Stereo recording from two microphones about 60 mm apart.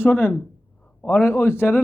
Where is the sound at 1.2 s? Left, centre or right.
Left.